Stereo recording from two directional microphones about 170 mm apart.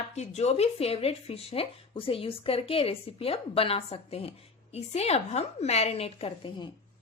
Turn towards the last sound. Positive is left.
turn(degrees=30)  # may be behind; listen again after turning